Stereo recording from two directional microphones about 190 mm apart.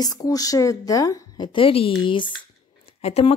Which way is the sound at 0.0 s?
20° left (ahead or behind).